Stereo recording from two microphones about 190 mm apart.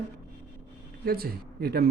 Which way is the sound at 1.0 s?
50° right (ahead or behind).